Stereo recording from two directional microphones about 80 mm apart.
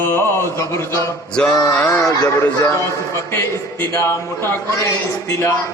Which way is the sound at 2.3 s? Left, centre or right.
Left.